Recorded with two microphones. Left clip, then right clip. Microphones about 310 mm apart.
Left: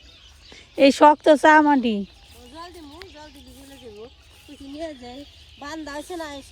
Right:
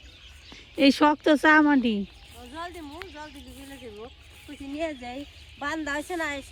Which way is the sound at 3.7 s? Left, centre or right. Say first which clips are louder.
Left 1 dB; right.